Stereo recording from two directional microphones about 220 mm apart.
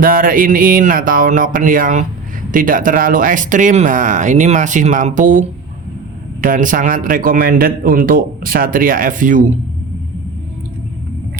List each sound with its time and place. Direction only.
0.0 s a man's voice: 40° right (ahead or behind)